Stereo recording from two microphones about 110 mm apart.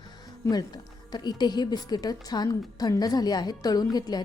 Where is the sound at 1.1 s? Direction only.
40° left (ahead or behind).